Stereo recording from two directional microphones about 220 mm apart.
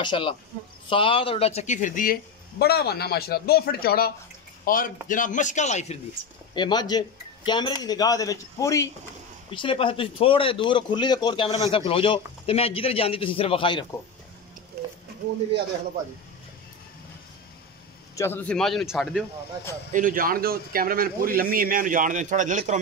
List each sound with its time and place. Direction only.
0.0 s a man's voice: 20° left (ahead or behind)
6.5 s a man's voice: 20° left (ahead or behind)
18.1 s a man's voice: 10° left (ahead or behind)
19.9 s a man's voice: 35° right (ahead or behind)